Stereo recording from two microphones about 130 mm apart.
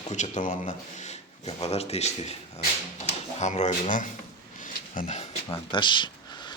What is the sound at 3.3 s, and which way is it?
Speech, 65° left (ahead or behind).